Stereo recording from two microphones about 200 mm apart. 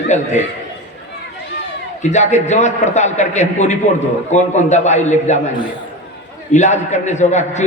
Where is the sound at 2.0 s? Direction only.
35° left (ahead or behind).